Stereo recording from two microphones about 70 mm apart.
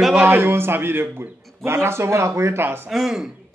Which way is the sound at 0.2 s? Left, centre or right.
Right.